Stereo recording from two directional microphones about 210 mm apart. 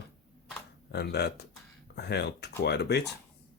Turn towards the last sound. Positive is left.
turn(degrees=50)  # may be behind; listen again after turning